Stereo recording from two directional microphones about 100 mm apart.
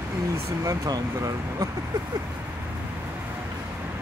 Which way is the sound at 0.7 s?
40° right (ahead or behind).